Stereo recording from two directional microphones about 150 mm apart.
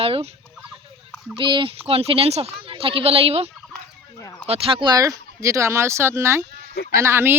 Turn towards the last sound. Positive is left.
turn(degrees=-15)  # may be behind; listen again after turning